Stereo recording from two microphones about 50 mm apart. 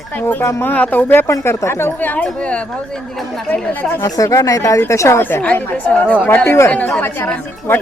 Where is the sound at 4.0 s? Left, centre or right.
Left.